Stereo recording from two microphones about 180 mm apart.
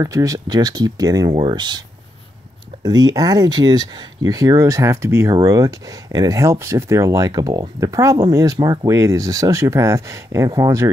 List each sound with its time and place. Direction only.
0.0 s speech: 20° right (ahead or behind)